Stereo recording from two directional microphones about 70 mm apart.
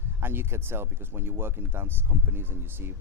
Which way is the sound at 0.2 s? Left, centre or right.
Right.